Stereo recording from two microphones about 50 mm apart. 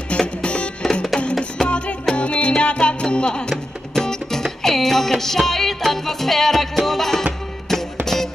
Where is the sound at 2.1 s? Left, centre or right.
Left.